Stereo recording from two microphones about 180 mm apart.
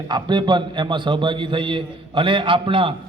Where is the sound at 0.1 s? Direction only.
25° right (ahead or behind).